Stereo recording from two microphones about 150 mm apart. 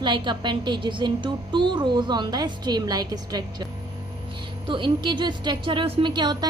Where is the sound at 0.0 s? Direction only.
30° right (ahead or behind).